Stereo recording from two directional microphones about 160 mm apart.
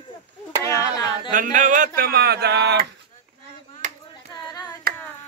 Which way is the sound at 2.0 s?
75° right (ahead or behind).